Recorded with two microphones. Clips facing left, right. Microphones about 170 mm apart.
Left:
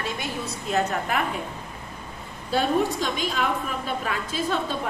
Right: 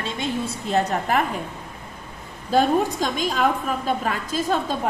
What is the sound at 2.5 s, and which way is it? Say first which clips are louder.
A woman's voice: right 3 dB; 45° right (ahead or behind).